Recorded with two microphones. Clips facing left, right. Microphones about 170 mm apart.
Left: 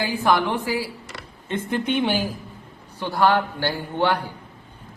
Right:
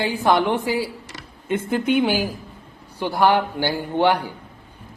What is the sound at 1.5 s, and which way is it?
A woman's voice, 5° right (ahead or behind).